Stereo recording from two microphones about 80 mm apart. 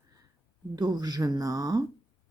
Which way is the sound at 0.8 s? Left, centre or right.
Right.